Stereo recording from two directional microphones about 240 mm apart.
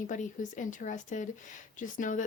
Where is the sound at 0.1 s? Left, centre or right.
Left.